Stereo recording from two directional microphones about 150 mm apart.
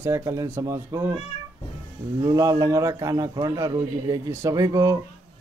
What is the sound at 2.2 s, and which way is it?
A man's voice, 25° right (ahead or behind).